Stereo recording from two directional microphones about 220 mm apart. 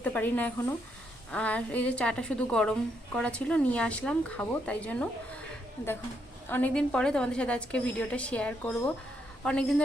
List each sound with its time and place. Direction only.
0.0 s a woman's voice: 10° left (ahead or behind)
6.5 s a woman's voice: 5° left (ahead or behind)